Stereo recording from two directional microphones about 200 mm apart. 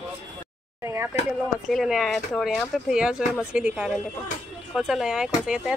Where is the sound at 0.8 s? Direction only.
15° right (ahead or behind).